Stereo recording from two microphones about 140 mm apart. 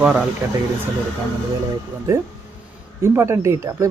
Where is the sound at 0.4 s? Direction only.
15° right (ahead or behind).